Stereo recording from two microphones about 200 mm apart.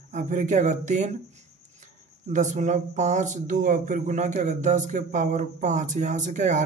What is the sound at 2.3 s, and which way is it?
Speech, 40° right (ahead or behind).